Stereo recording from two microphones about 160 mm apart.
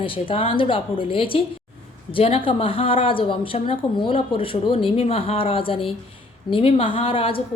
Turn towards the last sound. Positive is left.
turn(degrees=35)  # may be behind; listen again after turning